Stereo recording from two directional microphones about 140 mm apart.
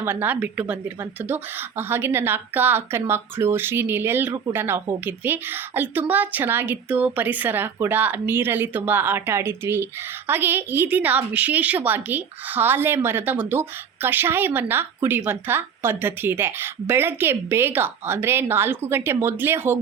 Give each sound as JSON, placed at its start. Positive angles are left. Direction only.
{"t": 0.0, "sound": "a woman's voice", "side_deg": -15}